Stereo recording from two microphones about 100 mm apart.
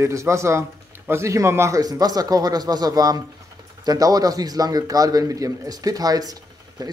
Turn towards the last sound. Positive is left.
turn(degrees=-40)  # may be behind; listen again after turning